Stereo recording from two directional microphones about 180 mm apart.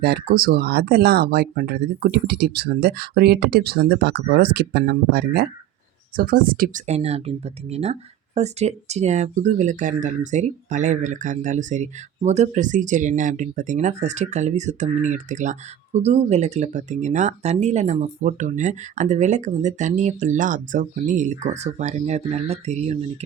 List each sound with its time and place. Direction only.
0.0 s speech: 60° right (ahead or behind)
6.8 s speech: 35° right (ahead or behind)